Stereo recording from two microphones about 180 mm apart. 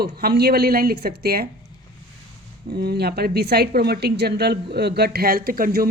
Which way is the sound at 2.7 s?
65° right (ahead or behind).